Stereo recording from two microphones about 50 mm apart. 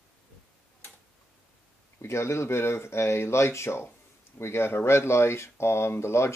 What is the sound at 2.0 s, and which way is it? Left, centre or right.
Speech, left.